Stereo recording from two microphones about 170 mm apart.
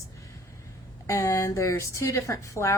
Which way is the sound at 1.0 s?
15° left (ahead or behind).